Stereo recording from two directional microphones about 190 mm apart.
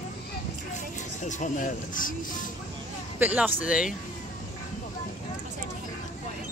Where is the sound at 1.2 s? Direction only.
45° left (ahead or behind).